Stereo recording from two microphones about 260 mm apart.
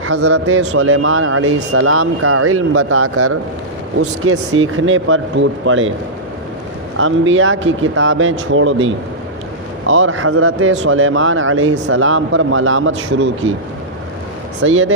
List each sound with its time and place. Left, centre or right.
0.0 s a man's voice: right
7.0 s a man's voice: right
14.6 s a man's voice: right